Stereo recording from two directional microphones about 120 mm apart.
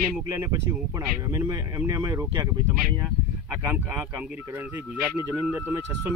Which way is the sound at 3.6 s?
15° right (ahead or behind).